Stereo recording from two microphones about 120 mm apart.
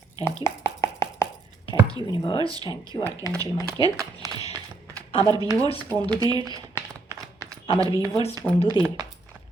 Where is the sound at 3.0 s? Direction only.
35° left (ahead or behind).